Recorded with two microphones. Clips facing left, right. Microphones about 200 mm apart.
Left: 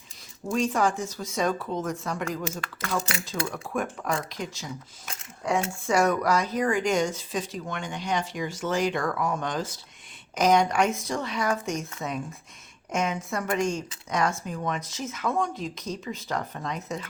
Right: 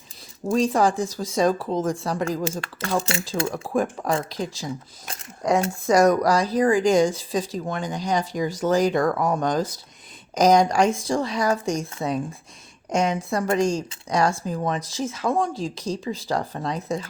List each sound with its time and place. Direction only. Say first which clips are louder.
0.4 s speech: right 5 dB; 35° right (ahead or behind)